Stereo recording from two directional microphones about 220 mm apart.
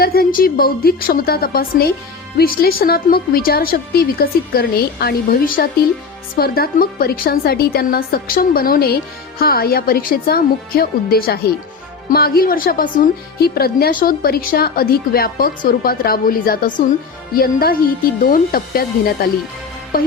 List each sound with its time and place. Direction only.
0.0 s a woman's voice: 45° left (ahead or behind)